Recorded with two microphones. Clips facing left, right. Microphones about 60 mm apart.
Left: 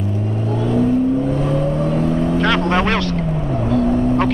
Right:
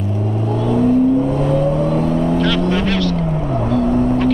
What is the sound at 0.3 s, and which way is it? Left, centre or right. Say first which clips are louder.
Car: right 3 dB; right.